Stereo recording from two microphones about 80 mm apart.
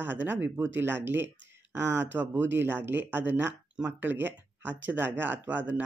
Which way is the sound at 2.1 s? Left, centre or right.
Right.